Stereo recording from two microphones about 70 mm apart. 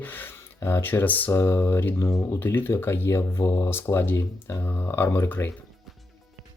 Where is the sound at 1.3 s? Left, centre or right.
Left.